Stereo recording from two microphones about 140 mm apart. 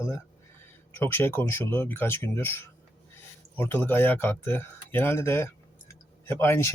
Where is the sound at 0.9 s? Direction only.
15° left (ahead or behind).